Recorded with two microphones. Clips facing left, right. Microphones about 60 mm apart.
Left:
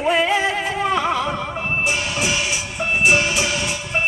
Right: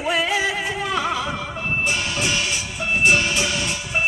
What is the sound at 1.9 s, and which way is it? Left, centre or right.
Music, centre.